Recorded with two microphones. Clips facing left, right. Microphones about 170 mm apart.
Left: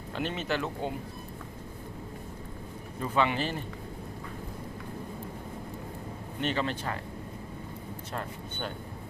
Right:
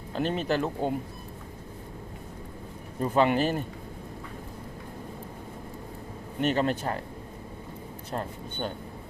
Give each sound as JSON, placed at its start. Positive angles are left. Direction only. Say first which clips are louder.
{"t": 0.1, "sound": "speech", "louder": "right 4 dB", "side_deg": -40}
{"t": 3.0, "sound": "speech", "louder": "right 5 dB", "side_deg": -45}
{"t": 6.4, "sound": "speech", "louder": "right 5 dB", "side_deg": -45}